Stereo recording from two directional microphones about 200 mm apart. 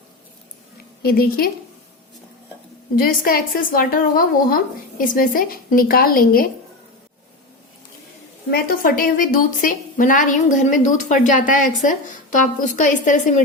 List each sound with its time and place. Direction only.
1.0 s a woman's voice: 50° left (ahead or behind)
2.9 s a woman's voice: 45° left (ahead or behind)
8.4 s a woman's voice: 50° left (ahead or behind)